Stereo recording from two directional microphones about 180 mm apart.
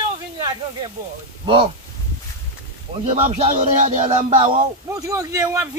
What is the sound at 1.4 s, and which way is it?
Speech, 30° right (ahead or behind).